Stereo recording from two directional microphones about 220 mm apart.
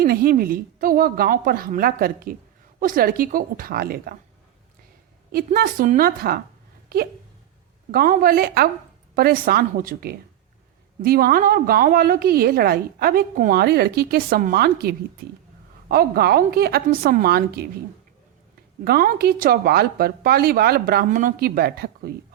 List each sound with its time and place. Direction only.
0.0 s a woman's voice: 40° right (ahead or behind)
5.3 s a woman's voice: 45° right (ahead or behind)
7.9 s a woman's voice: 40° right (ahead or behind)
18.9 s a woman's voice: 45° right (ahead or behind)